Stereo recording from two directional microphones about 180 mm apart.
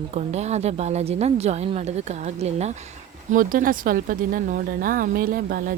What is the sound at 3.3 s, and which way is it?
Speech, 50° right (ahead or behind).